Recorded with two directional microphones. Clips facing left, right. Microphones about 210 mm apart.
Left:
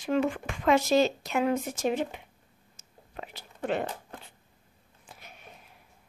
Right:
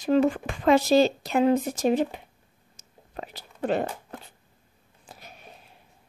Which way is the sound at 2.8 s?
40° right (ahead or behind).